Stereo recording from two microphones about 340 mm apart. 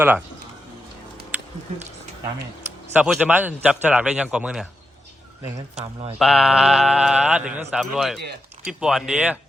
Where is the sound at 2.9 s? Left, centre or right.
Centre.